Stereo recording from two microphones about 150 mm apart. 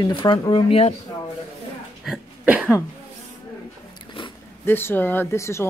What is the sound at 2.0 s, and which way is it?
Cough, 5° right (ahead or behind).